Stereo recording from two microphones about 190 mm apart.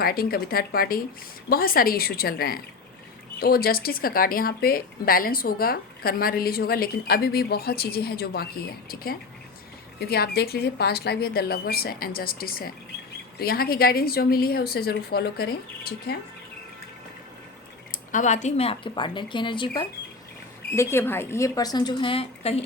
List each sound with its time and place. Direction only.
0.0 s speech: 50° left (ahead or behind)
17.9 s speech: 40° left (ahead or behind); by 19.9 s 25° left (ahead or behind)
20.7 s speech: 10° left (ahead or behind); by 22.6 s 30° left (ahead or behind)